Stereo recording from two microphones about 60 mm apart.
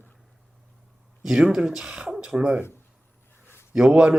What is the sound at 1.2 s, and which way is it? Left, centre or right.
Speech, centre.